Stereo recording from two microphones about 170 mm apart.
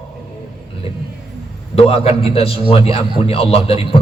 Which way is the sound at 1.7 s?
35° left (ahead or behind).